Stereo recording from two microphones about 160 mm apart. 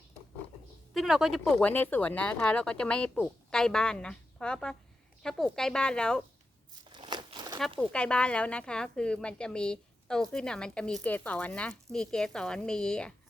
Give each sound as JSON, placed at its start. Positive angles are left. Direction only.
{"t": 0.9, "sound": "a woman's voice", "side_deg": 0}
{"t": 6.9, "sound": "crumpling", "side_deg": -30}
{"t": 7.8, "sound": "a woman's voice", "side_deg": 5}